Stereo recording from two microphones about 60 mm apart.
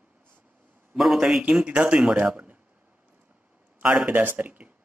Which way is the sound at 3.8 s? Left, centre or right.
Centre.